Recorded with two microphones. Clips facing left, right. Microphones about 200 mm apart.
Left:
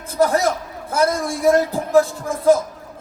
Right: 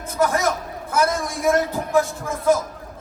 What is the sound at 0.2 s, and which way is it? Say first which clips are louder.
Speech: left 4 dB; 35° left (ahead or behind).